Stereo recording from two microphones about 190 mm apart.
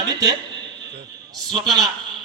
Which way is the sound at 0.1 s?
20° right (ahead or behind).